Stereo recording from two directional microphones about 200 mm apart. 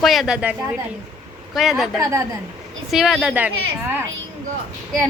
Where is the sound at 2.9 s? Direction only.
Centre (ahead or behind).